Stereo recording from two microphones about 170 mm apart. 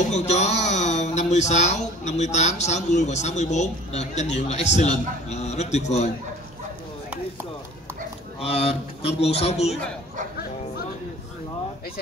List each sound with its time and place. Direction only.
0.1 s speech: 40° left (ahead or behind)
8.4 s a man's voice: 35° left (ahead or behind)